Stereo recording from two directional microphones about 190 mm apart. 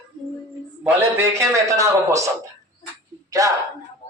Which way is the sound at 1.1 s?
15° right (ahead or behind).